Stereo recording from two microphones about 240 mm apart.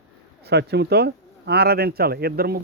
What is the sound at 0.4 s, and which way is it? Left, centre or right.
Speech, right.